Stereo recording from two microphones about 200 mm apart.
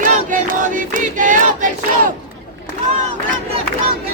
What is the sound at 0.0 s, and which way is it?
Choir, 40° right (ahead or behind).